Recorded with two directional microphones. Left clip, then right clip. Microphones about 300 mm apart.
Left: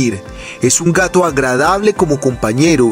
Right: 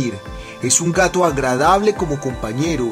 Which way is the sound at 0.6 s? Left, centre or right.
Centre.